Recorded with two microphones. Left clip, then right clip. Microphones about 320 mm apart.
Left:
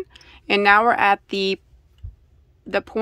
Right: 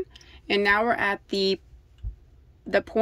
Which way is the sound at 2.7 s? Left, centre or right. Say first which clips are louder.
Even; centre.